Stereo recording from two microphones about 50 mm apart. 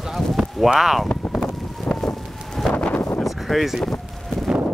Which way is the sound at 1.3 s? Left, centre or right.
Centre.